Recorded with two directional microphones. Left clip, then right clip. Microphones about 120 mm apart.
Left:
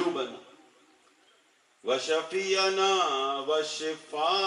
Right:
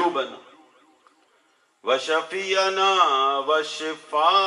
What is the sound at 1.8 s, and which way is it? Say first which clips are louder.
A man's voice: right 6 dB; 30° right (ahead or behind).